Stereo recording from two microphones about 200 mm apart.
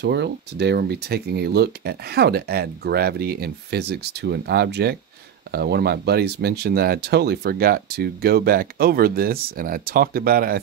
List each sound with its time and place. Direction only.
0.0 s speech: 60° right (ahead or behind)